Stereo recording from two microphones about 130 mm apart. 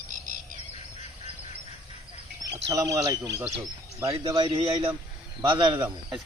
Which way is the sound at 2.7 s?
25° right (ahead or behind).